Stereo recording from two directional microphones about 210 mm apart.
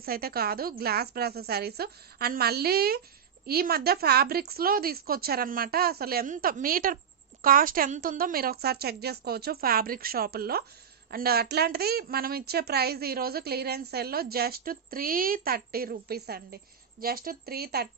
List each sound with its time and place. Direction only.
0.0 s a woman's voice: 45° right (ahead or behind)